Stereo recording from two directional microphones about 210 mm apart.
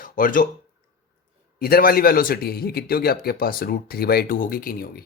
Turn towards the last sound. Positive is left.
turn(degrees=45)  # may be behind; listen again after turning